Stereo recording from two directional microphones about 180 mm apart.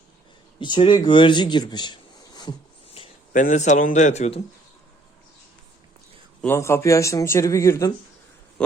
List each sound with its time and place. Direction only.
0.6 s speech: 25° left (ahead or behind)
3.3 s a man's voice: 45° left (ahead or behind)
6.4 s speech: 15° left (ahead or behind)